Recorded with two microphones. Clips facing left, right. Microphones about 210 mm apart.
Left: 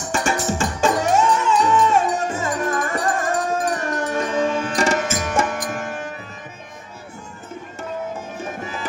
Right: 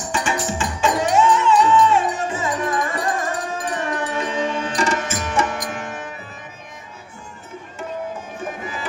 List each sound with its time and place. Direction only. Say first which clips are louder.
0.1 s music: left 2 dB; 45° left (ahead or behind)